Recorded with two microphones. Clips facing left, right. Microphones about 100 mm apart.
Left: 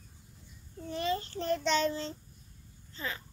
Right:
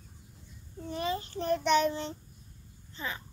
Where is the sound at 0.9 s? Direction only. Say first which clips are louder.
Even; 15° right (ahead or behind).